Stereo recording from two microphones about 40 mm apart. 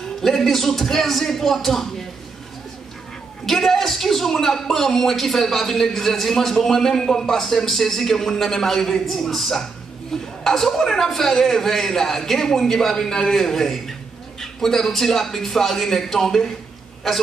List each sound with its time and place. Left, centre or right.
0.2 s a man's voice: centre
3.4 s a man's voice: centre